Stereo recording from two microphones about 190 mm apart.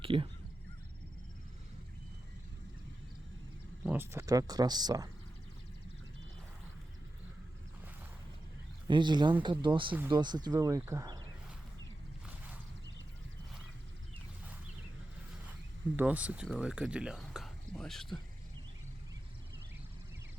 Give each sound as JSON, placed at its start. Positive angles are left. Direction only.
{"t": 0.0, "sound": "speech", "side_deg": -30}
{"t": 3.8, "sound": "speech", "side_deg": -10}
{"t": 8.9, "sound": "speech", "side_deg": -25}
{"t": 16.0, "sound": "speech", "side_deg": -10}